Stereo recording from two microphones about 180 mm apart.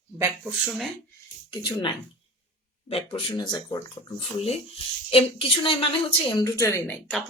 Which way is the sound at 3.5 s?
20° left (ahead or behind).